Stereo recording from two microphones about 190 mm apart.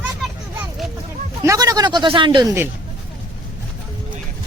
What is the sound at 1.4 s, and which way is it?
Speech, 15° right (ahead or behind).